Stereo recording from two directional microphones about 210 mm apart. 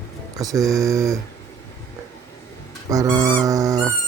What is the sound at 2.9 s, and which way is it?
Music, 15° right (ahead or behind).